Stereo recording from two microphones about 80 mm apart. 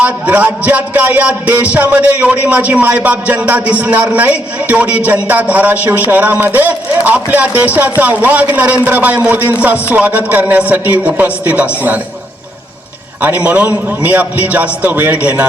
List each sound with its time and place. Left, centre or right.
0.0 s speech: centre
13.2 s speech: centre